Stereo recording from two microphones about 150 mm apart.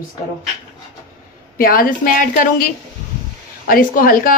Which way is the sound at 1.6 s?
70° left (ahead or behind).